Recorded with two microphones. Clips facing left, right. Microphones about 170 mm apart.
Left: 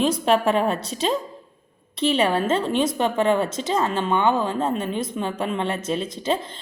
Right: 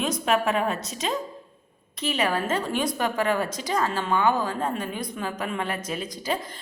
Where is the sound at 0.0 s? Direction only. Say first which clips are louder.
Left 5 dB; 30° left (ahead or behind).